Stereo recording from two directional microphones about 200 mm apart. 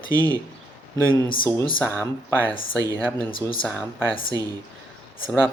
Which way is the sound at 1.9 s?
10° left (ahead or behind).